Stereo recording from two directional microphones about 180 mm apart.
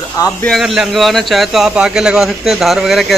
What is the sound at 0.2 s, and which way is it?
Speech, 20° left (ahead or behind).